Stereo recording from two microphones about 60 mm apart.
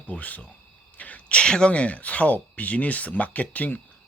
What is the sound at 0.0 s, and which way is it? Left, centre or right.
Speech, left.